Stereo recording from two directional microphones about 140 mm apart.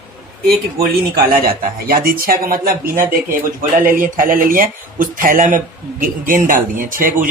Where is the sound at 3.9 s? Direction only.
75° right (ahead or behind).